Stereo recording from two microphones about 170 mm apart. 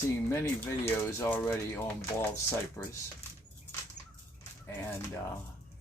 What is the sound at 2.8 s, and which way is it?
Speech, 15° left (ahead or behind).